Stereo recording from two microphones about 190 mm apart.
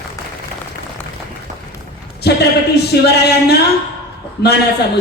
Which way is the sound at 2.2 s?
60° left (ahead or behind).